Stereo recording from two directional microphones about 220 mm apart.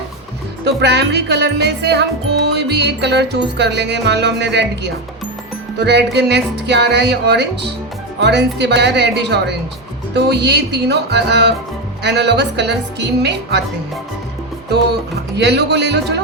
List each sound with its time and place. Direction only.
0.6 s music: 50° right (ahead or behind)
15.4 s music: 50° right (ahead or behind)